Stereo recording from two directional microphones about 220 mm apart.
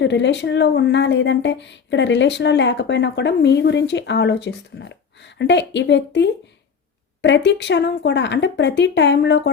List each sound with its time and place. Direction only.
0.0 s speech: 55° left (ahead or behind)